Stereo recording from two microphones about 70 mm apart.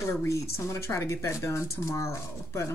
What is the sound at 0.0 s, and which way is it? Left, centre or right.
A woman's voice, left.